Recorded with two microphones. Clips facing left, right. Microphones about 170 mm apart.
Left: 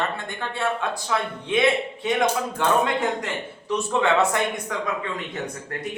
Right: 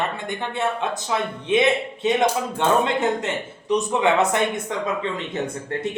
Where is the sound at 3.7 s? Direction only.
20° right (ahead or behind).